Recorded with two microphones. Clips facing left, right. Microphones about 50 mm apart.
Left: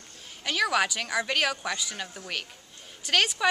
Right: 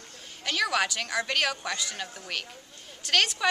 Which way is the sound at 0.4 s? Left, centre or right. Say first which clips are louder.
Left 1 dB; centre.